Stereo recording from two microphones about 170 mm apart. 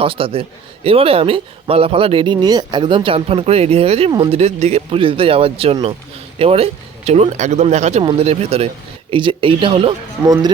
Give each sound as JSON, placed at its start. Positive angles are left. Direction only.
{"t": 0.0, "sound": "speech", "side_deg": -30}
{"t": 4.1, "sound": "speech", "side_deg": -25}
{"t": 4.4, "sound": "speech", "side_deg": -40}